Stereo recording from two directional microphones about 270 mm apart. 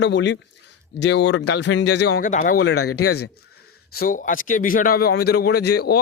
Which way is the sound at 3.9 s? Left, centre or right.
Left.